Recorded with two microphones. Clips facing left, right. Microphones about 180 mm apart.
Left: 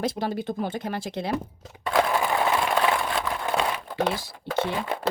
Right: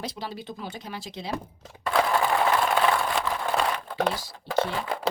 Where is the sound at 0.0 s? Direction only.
50° left (ahead or behind).